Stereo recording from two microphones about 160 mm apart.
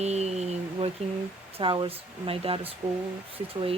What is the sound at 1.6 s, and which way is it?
A woman's voice, 35° right (ahead or behind).